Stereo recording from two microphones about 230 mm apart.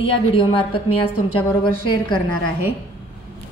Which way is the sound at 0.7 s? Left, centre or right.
Left.